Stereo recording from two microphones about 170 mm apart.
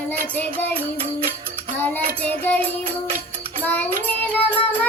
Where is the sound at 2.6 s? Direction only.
35° right (ahead or behind).